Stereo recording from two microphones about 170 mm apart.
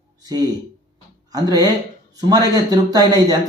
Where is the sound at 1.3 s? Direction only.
25° right (ahead or behind).